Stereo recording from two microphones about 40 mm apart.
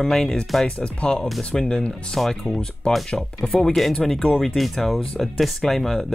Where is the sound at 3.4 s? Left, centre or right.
Centre.